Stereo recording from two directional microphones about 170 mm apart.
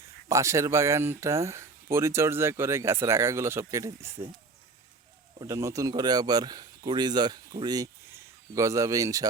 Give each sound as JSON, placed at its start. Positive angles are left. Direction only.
{"t": 0.3, "sound": "speech", "side_deg": -20}
{"t": 5.4, "sound": "speech", "side_deg": -20}